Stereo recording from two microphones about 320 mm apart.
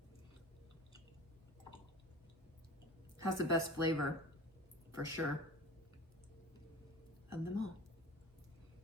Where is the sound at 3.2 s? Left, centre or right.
Right.